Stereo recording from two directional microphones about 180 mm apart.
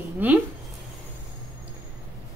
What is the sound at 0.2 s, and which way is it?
Speech, 10° right (ahead or behind).